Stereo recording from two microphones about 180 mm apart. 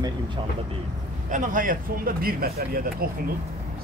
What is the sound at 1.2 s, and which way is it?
Speech, 45° right (ahead or behind).